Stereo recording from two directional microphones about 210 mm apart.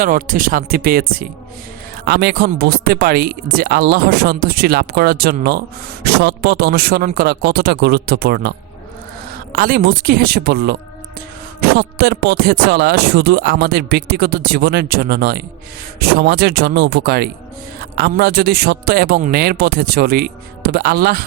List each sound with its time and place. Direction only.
0.0 s speech: 40° right (ahead or behind)